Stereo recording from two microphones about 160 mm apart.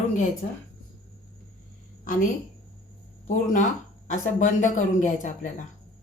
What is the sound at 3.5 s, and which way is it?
Speech, 50° left (ahead or behind).